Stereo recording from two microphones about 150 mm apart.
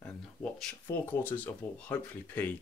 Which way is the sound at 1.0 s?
10° left (ahead or behind).